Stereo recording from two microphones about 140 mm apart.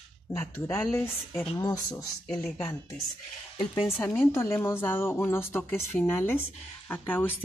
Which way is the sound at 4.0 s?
15° left (ahead or behind).